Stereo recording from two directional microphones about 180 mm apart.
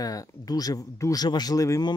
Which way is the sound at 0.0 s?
20° left (ahead or behind).